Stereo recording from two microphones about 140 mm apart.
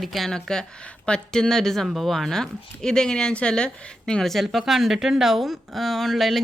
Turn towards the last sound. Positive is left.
turn(degrees=0)  # may be behind; listen again after turning